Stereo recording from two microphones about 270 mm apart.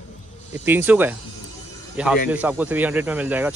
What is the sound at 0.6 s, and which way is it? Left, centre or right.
Speech, centre.